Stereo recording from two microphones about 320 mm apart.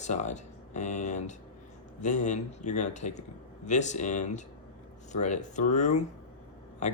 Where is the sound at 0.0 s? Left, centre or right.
Left.